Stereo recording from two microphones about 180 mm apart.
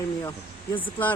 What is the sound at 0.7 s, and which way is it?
Speech, 10° left (ahead or behind).